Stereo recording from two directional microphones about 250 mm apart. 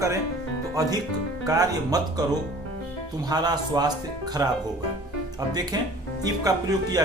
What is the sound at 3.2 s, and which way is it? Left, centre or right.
Speech, centre.